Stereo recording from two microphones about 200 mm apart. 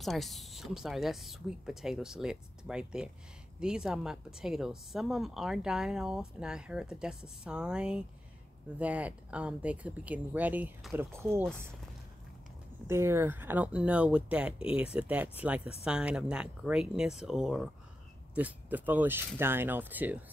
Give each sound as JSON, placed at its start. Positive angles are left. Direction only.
{"t": 0.0, "sound": "speech", "side_deg": 0}
{"t": 12.8, "sound": "speech", "side_deg": -15}